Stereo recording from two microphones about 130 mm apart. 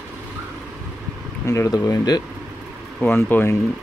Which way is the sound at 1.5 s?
25° left (ahead or behind).